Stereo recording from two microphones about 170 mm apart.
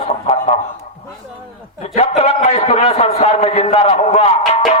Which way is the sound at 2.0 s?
40° left (ahead or behind).